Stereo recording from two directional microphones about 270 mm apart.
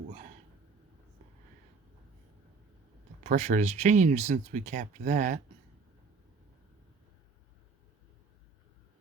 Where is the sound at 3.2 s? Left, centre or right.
Right.